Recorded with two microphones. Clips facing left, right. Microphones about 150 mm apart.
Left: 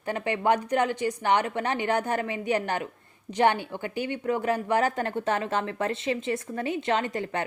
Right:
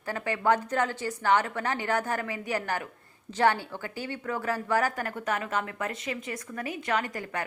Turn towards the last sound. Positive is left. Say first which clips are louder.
# left 3 dB
turn(degrees=25)  # may be behind; listen again after turning